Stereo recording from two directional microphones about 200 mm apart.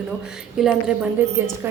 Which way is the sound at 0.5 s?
5° right (ahead or behind).